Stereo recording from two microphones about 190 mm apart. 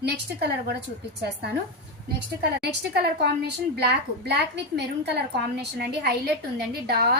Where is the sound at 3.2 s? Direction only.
60° right (ahead or behind).